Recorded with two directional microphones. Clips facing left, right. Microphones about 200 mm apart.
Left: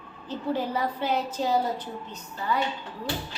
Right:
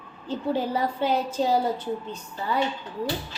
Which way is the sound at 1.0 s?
30° right (ahead or behind).